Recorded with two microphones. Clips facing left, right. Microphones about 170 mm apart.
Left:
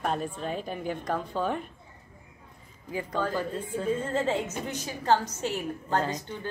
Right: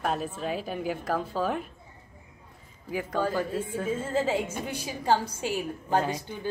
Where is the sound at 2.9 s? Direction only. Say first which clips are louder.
Right 2 dB; 10° right (ahead or behind).